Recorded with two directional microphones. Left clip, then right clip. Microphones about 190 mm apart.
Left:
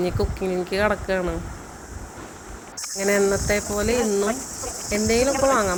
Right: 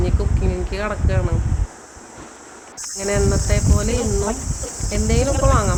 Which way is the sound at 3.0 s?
15° left (ahead or behind).